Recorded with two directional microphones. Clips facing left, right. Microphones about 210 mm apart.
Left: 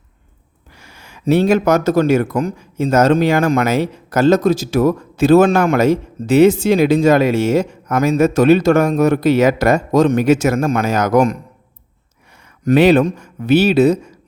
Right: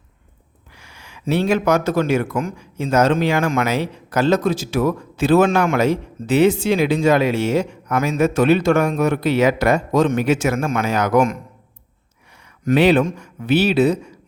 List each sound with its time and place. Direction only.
0.8 s speech: 45° left (ahead or behind)
12.6 s speech: 45° left (ahead or behind)